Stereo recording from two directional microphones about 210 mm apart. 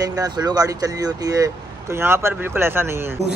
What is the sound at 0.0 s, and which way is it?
A man's voice, 20° right (ahead or behind).